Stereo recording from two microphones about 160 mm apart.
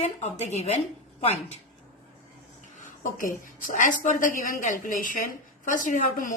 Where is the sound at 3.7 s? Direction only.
55° left (ahead or behind).